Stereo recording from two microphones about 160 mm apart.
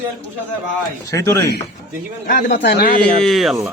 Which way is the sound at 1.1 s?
20° left (ahead or behind).